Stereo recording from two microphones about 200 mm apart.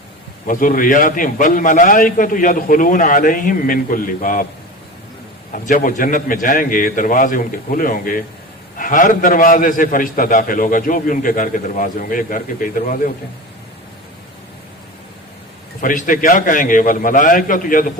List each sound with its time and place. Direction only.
0.4 s a man's voice: 45° left (ahead or behind)
5.5 s a man's voice: 40° left (ahead or behind)
15.8 s a man's voice: 40° left (ahead or behind)